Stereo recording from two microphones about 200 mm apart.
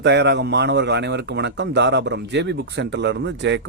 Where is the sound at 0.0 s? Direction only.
60° right (ahead or behind).